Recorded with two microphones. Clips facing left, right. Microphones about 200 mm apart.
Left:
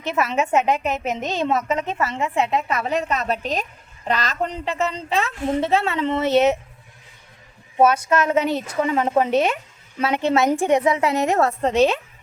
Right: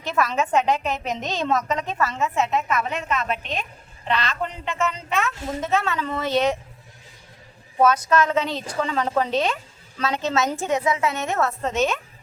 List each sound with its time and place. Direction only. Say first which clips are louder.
0.2 s speech: left 1 dB; 20° left (ahead or behind)
0.5 s a woman's voice: left 2 dB; 10° left (ahead or behind)
1.8 s a woman's voice: left 1 dB; 25° left (ahead or behind)
7.9 s a woman's voice: left 1 dB; 10° left (ahead or behind)
8.1 s speech: left 1 dB; 30° left (ahead or behind)
8.4 s a woman's voice: left 5 dB; 10° left (ahead or behind)
9.0 s speech: left 3 dB; 20° left (ahead or behind)
9.3 s a woman's voice: left 4 dB; 10° left (ahead or behind)
10.7 s a woman's voice: left 4 dB; 35° left (ahead or behind)